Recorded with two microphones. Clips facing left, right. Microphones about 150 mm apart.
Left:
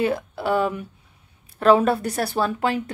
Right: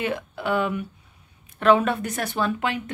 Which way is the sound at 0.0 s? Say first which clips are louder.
Left 4 dB; 35° left (ahead or behind).